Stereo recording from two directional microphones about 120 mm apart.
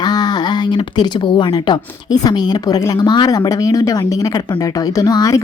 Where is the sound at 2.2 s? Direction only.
35° left (ahead or behind).